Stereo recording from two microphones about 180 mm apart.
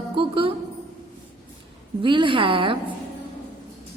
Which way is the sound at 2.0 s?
30° right (ahead or behind).